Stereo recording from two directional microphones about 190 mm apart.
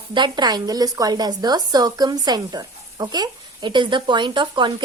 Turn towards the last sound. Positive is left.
turn(degrees=-25)  # may be behind; listen again after turning